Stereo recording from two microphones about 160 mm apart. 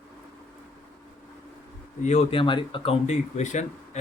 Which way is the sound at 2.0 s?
45° left (ahead or behind).